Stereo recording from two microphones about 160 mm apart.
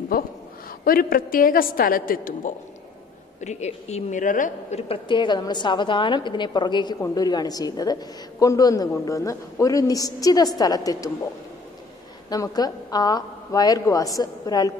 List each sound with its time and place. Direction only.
0.1 s a woman's voice: 65° left (ahead or behind)
3.3 s a woman's voice: 45° left (ahead or behind); by 11.1 s 20° left (ahead or behind)
12.3 s a woman's voice: 25° left (ahead or behind)